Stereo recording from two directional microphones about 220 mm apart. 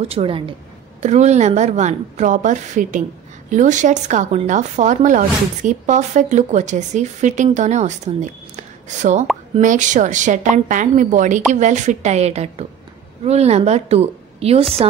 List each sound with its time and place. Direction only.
0.1 s a woman's voice: 25° right (ahead or behind)